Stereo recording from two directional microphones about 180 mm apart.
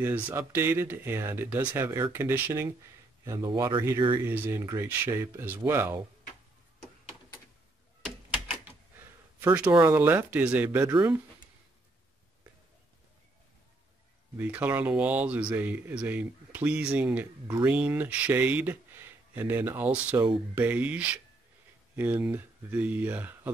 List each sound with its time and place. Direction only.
0.0 s speech: 15° right (ahead or behind)
8.3 s typewriter: 10° right (ahead or behind)
9.4 s speech: 10° right (ahead or behind)
11.0 s speech: 20° right (ahead or behind)
14.3 s speech: 10° right (ahead or behind)